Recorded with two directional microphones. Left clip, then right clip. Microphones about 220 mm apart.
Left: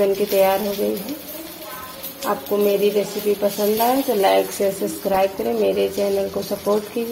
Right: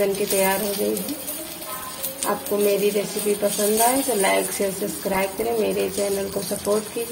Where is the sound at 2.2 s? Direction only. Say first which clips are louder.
Left 2 dB; 15° left (ahead or behind).